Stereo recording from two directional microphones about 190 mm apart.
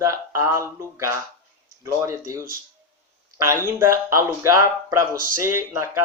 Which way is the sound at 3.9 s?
15° right (ahead or behind).